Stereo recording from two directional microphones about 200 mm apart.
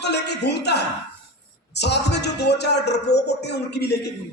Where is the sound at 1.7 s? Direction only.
55° left (ahead or behind).